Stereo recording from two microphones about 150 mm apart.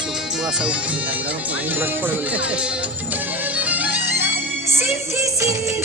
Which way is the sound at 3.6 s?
10° right (ahead or behind).